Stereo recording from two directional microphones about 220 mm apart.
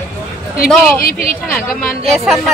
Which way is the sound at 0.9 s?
40° left (ahead or behind).